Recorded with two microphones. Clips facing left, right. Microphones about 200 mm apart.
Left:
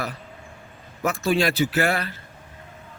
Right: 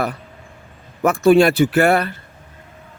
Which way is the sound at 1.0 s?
55° right (ahead or behind).